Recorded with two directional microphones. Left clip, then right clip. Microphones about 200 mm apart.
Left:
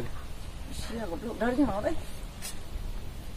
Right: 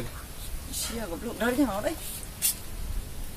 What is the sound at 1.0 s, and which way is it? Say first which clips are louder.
Speech: right 1 dB; 15° right (ahead or behind).